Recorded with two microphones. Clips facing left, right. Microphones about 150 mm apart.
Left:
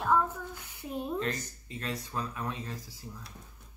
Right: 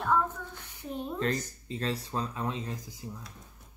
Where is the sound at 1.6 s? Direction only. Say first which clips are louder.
Right 4 dB; 30° right (ahead or behind).